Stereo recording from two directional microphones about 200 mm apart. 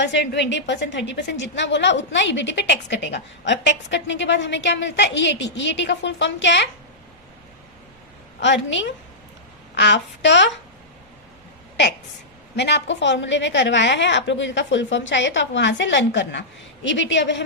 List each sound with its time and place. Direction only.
0.0 s a woman's voice: 60° left (ahead or behind)
8.4 s a woman's voice: 65° left (ahead or behind)
12.5 s a woman's voice: 60° left (ahead or behind)